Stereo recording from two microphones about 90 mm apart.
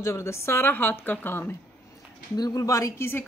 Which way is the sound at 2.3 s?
50° left (ahead or behind).